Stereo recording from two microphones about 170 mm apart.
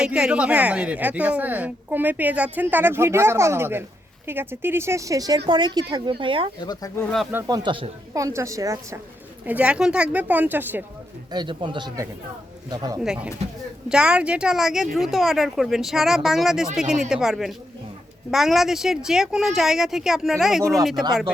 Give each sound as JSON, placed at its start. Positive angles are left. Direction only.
{"t": 0.0, "sound": "a woman's voice", "side_deg": -5}
{"t": 6.6, "sound": "speech", "side_deg": 25}
{"t": 7.3, "sound": "speech", "side_deg": -15}
{"t": 8.2, "sound": "a woman's voice", "side_deg": -15}
{"t": 11.3, "sound": "speech", "side_deg": -25}
{"t": 13.1, "sound": "a woman's voice", "side_deg": -5}